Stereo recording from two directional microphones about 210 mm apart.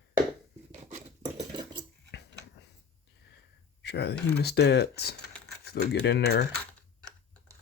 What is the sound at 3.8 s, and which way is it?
Speech, 55° left (ahead or behind).